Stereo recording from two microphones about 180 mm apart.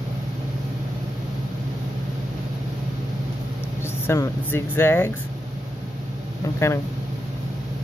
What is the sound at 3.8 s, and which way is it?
Speech, 15° left (ahead or behind).